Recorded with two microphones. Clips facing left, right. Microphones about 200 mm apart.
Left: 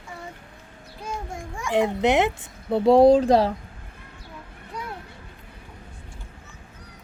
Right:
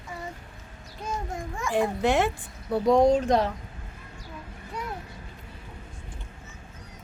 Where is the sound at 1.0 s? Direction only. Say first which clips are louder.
Right 1 dB; 15° left (ahead or behind); by 3.5 s 30° left (ahead or behind).